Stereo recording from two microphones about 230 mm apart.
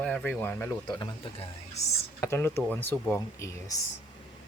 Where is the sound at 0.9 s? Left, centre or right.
Left.